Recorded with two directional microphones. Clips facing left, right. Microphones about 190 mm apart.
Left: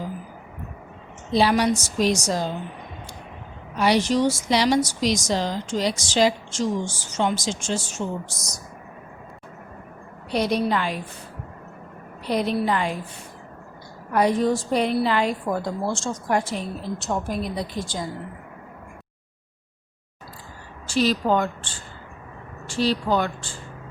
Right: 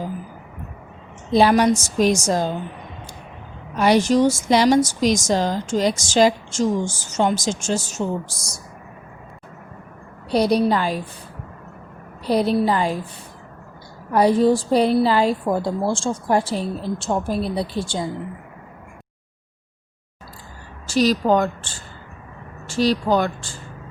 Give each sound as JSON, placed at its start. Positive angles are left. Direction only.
{"t": 1.3, "sound": "a woman's voice", "side_deg": -50}
{"t": 3.8, "sound": "a woman's voice", "side_deg": -45}
{"t": 10.3, "sound": "a woman's voice", "side_deg": -35}
{"t": 12.2, "sound": "a woman's voice", "side_deg": -35}
{"t": 14.1, "sound": "a woman's voice", "side_deg": -35}
{"t": 20.8, "sound": "a woman's voice", "side_deg": -40}